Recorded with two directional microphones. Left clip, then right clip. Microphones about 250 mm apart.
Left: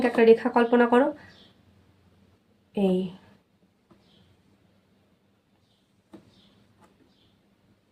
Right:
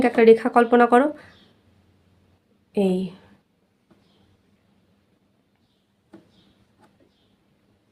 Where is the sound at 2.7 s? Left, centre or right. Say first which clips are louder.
Right 3 dB; right.